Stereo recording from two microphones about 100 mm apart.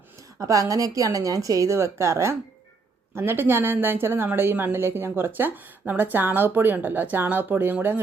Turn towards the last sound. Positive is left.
turn(degrees=-15)  # may be behind; listen again after turning